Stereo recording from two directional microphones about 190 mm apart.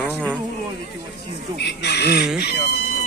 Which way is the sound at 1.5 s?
60° left (ahead or behind).